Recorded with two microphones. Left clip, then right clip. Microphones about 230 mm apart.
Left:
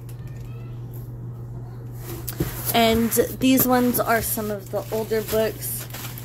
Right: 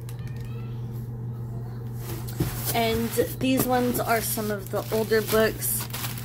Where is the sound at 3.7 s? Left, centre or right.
Left.